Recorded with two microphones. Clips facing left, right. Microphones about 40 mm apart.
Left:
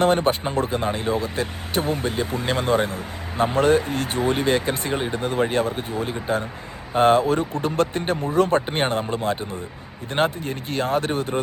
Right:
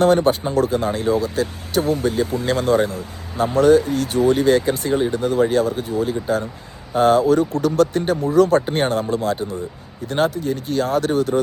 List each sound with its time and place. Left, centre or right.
0.0 s speech: left
2.5 s speech: left